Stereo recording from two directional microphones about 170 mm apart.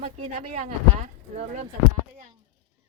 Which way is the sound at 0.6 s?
40° right (ahead or behind).